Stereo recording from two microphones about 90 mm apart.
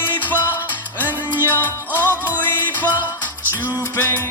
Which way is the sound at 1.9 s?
20° right (ahead or behind).